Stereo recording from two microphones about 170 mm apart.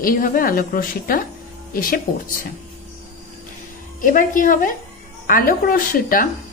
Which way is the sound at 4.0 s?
55° left (ahead or behind).